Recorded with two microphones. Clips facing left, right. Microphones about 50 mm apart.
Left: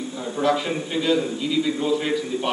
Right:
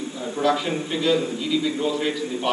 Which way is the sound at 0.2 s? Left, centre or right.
Centre.